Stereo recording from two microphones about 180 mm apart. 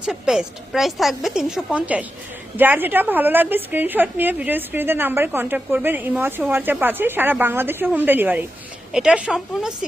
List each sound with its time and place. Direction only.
0.0 s a woman's voice: 5° right (ahead or behind)